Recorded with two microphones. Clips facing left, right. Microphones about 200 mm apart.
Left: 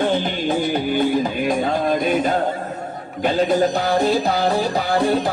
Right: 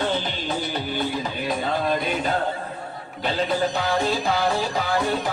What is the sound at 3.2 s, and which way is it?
Music, 45° left (ahead or behind).